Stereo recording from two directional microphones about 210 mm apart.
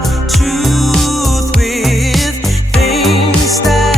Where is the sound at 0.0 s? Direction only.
Centre (ahead or behind).